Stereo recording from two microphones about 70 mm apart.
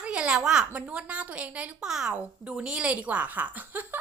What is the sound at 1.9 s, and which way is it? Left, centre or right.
A woman's voice, centre.